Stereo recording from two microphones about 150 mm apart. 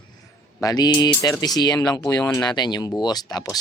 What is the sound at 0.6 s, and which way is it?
Speech, 25° left (ahead or behind).